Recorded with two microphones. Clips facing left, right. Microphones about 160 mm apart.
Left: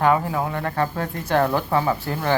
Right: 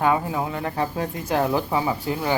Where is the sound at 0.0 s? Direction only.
15° right (ahead or behind).